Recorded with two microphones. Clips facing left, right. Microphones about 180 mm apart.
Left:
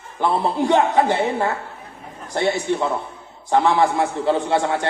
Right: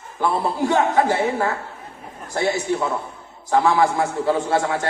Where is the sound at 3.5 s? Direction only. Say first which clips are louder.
Even; 25° left (ahead or behind).